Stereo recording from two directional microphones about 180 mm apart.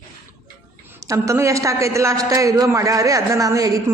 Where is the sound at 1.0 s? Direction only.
15° right (ahead or behind).